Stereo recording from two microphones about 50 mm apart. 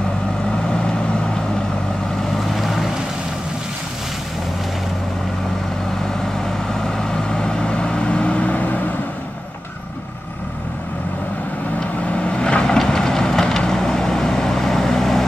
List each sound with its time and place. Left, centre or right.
2.3 s boat: centre
6.7 s vehicle: centre; by 8.8 s left
12.1 s vehicle: left; by 15.2 s centre